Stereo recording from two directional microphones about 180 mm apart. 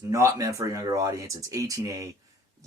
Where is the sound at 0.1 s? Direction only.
15° right (ahead or behind).